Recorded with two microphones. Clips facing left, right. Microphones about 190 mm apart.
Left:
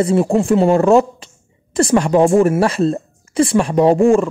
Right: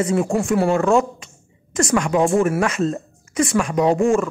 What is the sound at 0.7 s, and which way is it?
A woman's voice, 35° left (ahead or behind).